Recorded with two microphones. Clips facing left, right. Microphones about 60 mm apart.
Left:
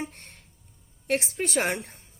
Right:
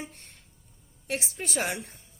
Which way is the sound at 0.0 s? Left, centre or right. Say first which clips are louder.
Left 5 dB; left.